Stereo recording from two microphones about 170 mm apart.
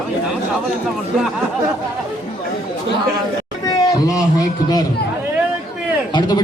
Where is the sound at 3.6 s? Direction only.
20° left (ahead or behind).